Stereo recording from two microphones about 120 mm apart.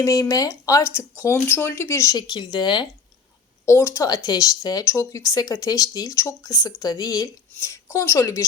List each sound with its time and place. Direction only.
0.0 s speech: 25° left (ahead or behind)
2.1 s speech: 40° left (ahead or behind)
3.7 s speech: 25° left (ahead or behind)